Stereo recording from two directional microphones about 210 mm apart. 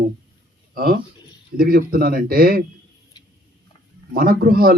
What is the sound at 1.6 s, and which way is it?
A man's voice, 45° right (ahead or behind).